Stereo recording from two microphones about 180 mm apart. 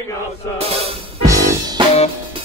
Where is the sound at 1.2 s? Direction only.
20° right (ahead or behind).